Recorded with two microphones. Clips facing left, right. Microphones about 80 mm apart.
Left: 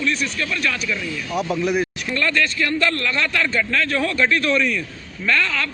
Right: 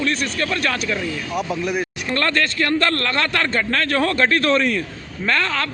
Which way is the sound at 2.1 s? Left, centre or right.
Right.